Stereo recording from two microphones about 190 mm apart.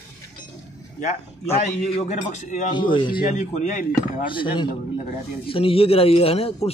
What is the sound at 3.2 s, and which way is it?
Speech, 40° left (ahead or behind).